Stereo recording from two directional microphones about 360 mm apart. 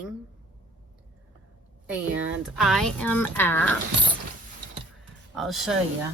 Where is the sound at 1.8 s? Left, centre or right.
Centre.